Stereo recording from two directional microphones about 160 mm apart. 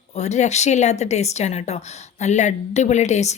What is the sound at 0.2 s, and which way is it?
Speech, 45° left (ahead or behind).